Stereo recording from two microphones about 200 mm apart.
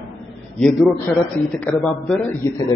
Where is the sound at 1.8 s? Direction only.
Centre (ahead or behind).